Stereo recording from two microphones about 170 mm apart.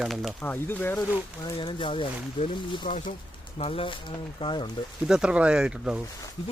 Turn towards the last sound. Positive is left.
turn(degrees=-5)  # may be behind; listen again after turning